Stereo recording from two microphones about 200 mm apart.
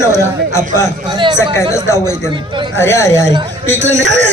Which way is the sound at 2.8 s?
15° left (ahead or behind).